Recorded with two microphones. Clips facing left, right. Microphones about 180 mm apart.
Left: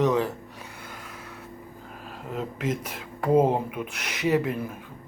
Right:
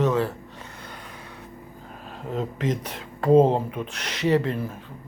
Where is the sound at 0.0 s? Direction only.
15° left (ahead or behind).